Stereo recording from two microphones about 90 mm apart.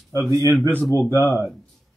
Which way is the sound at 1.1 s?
35° left (ahead or behind).